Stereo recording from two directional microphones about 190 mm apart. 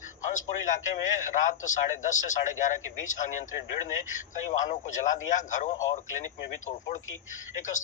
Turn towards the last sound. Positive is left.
turn(degrees=40)  # may be behind; listen again after turning